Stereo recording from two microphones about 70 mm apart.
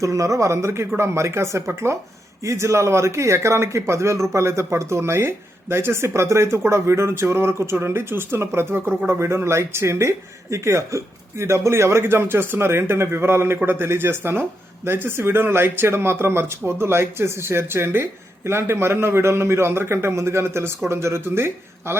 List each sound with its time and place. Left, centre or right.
0.0 s speech: right